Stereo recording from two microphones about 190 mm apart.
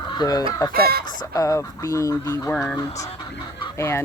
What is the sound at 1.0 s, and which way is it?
Speech, 20° left (ahead or behind).